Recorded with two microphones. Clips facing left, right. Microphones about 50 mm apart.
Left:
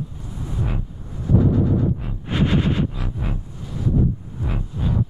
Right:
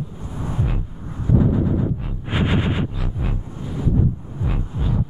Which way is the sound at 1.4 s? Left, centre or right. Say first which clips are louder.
Left 1 dB; centre.